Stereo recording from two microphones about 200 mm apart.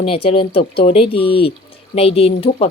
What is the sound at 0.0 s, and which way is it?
Speech, 30° left (ahead or behind).